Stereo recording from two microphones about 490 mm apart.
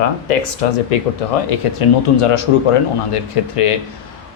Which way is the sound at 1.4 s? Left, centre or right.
Left.